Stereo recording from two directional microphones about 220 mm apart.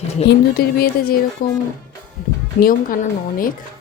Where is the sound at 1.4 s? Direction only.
40° left (ahead or behind).